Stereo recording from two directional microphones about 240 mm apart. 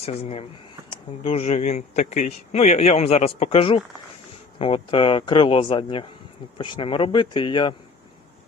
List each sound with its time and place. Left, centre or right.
0.0 s speech: left